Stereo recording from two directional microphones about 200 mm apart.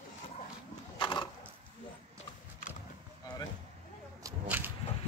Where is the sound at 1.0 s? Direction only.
25° left (ahead or behind).